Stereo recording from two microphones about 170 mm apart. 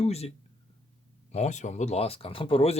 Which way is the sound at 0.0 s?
35° left (ahead or behind).